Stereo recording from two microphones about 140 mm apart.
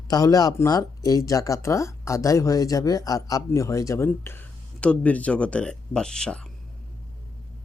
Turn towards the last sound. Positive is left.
turn(degrees=5)  # may be behind; listen again after turning